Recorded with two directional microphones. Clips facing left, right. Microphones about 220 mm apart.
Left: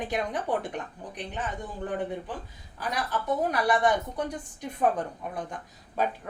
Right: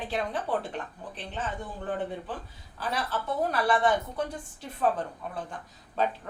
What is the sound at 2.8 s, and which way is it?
A woman's voice, 15° left (ahead or behind).